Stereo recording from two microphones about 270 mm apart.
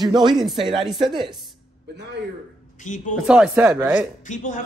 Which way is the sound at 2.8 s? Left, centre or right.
Left.